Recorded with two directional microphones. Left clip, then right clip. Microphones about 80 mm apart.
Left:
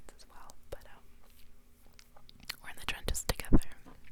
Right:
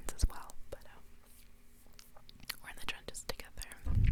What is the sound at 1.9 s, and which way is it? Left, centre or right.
Whispering, centre.